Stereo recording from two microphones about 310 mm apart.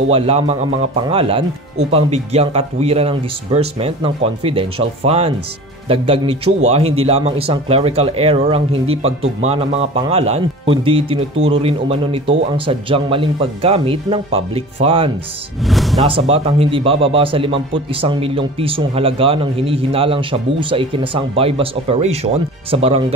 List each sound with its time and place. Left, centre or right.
0.1 s a man's voice: centre
15.6 s speech: centre
16.0 s a man's voice: centre